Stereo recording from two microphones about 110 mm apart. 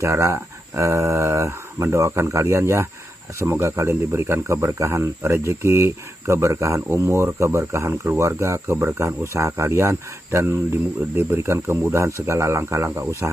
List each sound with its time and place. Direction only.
0.0 s speech: 25° right (ahead or behind)